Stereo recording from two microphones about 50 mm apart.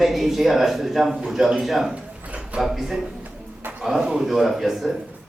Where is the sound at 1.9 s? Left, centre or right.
Right.